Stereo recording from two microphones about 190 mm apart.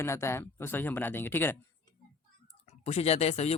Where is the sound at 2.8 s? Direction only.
35° left (ahead or behind).